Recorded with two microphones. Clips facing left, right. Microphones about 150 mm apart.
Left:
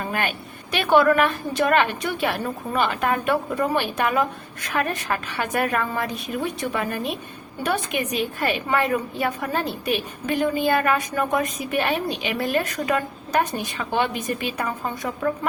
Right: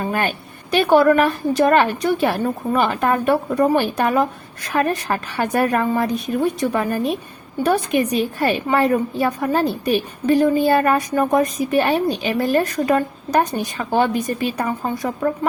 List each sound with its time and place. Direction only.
0.0 s a woman's voice: 35° right (ahead or behind)